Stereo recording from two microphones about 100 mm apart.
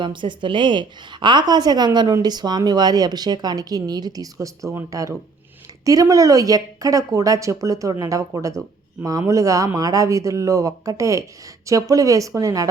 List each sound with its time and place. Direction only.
0.0 s a woman's voice: 55° right (ahead or behind); by 12.6 s 35° right (ahead or behind)